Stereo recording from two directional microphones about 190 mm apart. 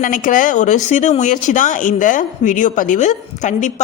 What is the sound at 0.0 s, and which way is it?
Speech, 45° left (ahead or behind).